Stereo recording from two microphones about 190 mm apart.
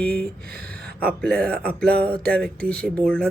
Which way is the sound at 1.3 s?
55° right (ahead or behind).